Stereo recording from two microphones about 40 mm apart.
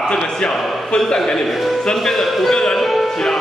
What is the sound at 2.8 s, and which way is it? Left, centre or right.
Music, centre.